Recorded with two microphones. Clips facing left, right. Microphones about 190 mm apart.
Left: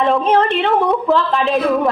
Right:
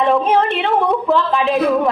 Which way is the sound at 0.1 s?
Centre (ahead or behind).